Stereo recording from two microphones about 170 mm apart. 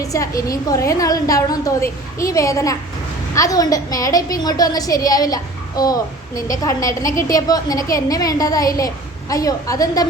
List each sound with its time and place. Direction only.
0.0 s a woman's voice: 20° left (ahead or behind)